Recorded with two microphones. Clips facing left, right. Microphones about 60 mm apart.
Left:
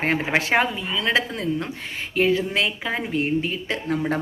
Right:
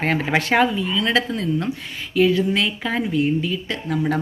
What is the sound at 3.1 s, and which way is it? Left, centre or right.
Speech, left.